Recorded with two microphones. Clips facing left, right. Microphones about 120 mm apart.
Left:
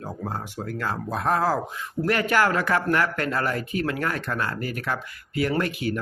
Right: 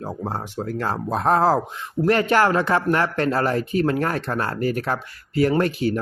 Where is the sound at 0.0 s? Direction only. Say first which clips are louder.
Right 4 dB; 30° right (ahead or behind).